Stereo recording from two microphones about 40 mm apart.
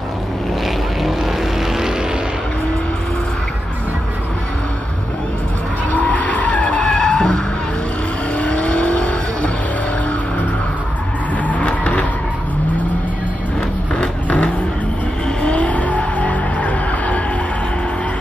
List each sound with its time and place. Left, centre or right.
5.9 s vehicle: left
7.0 s skidding: left
8.4 s vehicle: left
11.4 s vehicle: left
13.9 s vehicle: left